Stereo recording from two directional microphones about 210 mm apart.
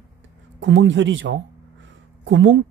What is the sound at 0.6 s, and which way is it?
A man's voice, 60° right (ahead or behind).